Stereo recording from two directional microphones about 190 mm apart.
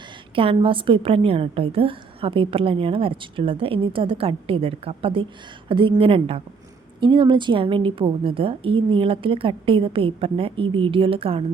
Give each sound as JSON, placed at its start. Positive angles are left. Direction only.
{"t": 0.3, "sound": "a woman's voice", "side_deg": -30}